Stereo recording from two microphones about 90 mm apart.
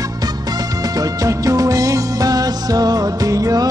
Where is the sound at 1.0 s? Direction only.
40° right (ahead or behind).